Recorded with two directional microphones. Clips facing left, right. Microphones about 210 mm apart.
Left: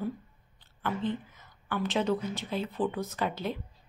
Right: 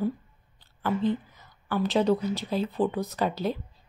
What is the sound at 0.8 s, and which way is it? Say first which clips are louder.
A woman's voice: right 5 dB; 40° right (ahead or behind).